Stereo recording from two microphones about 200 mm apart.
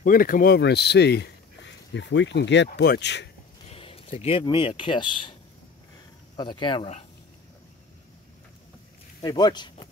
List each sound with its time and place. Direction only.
0.0 s speech: 45° left (ahead or behind); by 3.3 s 60° left (ahead or behind)
3.6 s speech: 30° left (ahead or behind)
6.3 s speech: 25° left (ahead or behind)
9.2 s speech: 20° left (ahead or behind)